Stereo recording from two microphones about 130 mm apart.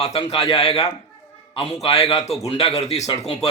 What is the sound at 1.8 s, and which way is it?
Speech, 50° left (ahead or behind).